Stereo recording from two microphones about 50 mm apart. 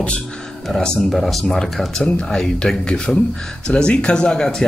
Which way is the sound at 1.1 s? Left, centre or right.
Centre.